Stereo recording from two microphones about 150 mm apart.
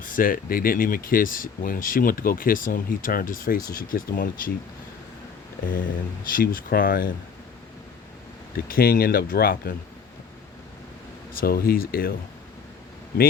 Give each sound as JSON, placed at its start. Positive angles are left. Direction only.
{"t": 0.2, "sound": "speech", "side_deg": 70}
{"t": 6.3, "sound": "speech", "side_deg": 70}
{"t": 8.5, "sound": "speech", "side_deg": 80}
{"t": 11.3, "sound": "speech", "side_deg": 85}